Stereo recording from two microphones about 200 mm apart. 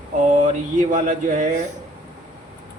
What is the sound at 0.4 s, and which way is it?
Speech, 40° right (ahead or behind).